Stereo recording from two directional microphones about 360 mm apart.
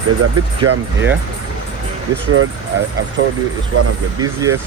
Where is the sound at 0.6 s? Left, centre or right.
Right.